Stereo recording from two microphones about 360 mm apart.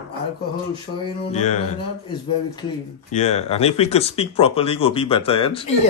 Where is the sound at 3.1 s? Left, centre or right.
Centre.